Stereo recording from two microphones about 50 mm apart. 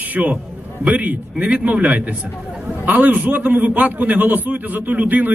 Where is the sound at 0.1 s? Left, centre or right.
Right.